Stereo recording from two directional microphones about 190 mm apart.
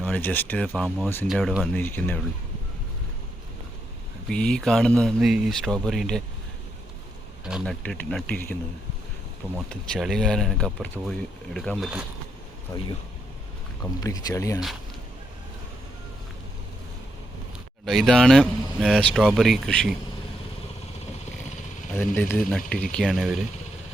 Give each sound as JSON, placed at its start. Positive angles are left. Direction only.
{"t": 0.0, "sound": "speech", "side_deg": 10}
{"t": 4.3, "sound": "speech", "side_deg": 5}
{"t": 7.4, "sound": "speech", "side_deg": 0}
{"t": 9.6, "sound": "speech", "side_deg": 0}
{"t": 14.0, "sound": "speech", "side_deg": 20}
{"t": 17.8, "sound": "speech", "side_deg": 0}
{"t": 21.9, "sound": "speech", "side_deg": 10}